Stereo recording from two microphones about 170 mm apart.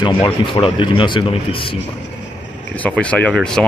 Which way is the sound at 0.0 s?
25° left (ahead or behind).